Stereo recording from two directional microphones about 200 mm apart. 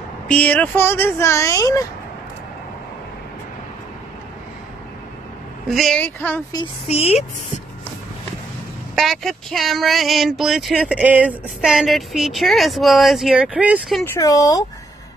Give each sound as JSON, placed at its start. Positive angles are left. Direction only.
{"t": 0.3, "sound": "speech", "side_deg": 5}
{"t": 5.7, "sound": "speech", "side_deg": 0}
{"t": 6.5, "sound": "speech", "side_deg": 25}
{"t": 8.9, "sound": "speech", "side_deg": 0}
{"t": 14.1, "sound": "speech", "side_deg": 15}